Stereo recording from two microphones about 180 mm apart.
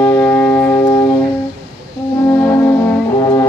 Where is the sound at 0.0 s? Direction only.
10° left (ahead or behind).